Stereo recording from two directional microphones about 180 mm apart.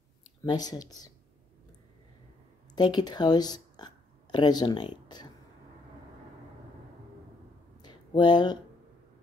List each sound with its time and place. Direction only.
0.4 s speech: 20° left (ahead or behind)
2.7 s speech: 25° left (ahead or behind)
7.8 s a sound: 25° left (ahead or behind)